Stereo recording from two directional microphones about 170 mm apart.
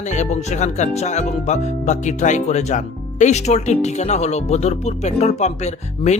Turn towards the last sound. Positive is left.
turn(degrees=40)  # may be behind; listen again after turning